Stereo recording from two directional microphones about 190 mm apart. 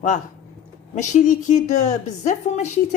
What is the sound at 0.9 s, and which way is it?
A woman's voice, 40° left (ahead or behind).